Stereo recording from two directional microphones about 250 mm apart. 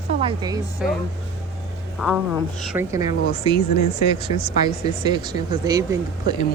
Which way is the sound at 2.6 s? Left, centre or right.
Centre.